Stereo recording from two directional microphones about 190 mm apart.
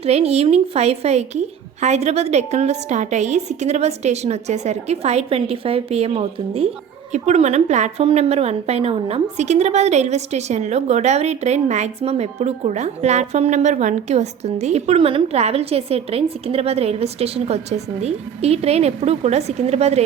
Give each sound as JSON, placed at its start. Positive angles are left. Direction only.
{"t": 0.0, "sound": "a woman's voice", "side_deg": -35}